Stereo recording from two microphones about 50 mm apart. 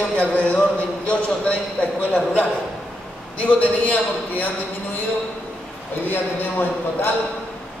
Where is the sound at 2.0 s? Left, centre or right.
Left.